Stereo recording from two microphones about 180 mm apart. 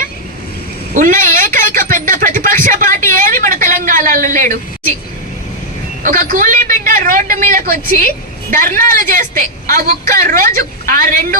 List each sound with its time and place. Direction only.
0.9 s speech: 45° right (ahead or behind)
1.5 s a sound: 50° right (ahead or behind)
6.0 s a woman's voice: 50° right (ahead or behind)